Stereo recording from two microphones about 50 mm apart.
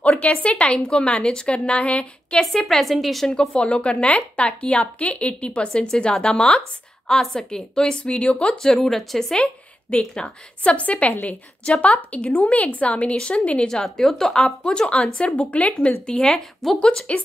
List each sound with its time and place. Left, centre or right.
0.2 s a woman's voice: left
2.5 s a woman's voice: centre
3.3 s a woman's voice: left
8.7 s a woman's voice: centre
9.4 s a woman's voice: centre
13.9 s a woman's voice: centre